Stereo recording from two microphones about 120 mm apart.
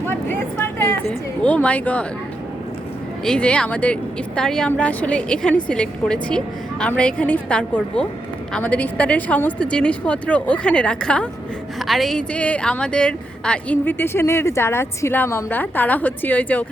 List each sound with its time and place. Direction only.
0.1 s a sound: 15° left (ahead or behind)
1.4 s speech: 10° left (ahead or behind)
3.2 s a woman's voice: 10° left (ahead or behind)